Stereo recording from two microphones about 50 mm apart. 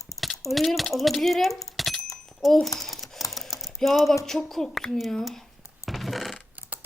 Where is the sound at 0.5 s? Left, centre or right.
Centre.